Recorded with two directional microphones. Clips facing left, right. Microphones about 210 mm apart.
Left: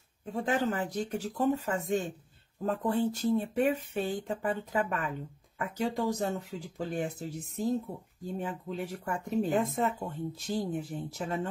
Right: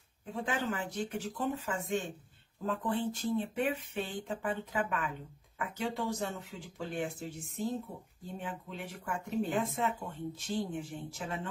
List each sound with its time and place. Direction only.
0.2 s speech: 40° left (ahead or behind)